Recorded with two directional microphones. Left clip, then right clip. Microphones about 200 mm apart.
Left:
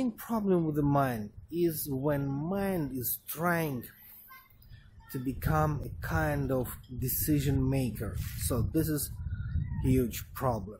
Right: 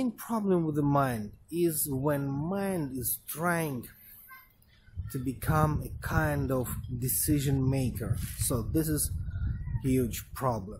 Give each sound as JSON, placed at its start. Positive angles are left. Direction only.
{"t": 0.0, "sound": "speech", "side_deg": -5}
{"t": 5.4, "sound": "speech", "side_deg": -5}
{"t": 8.5, "sound": "speech", "side_deg": -5}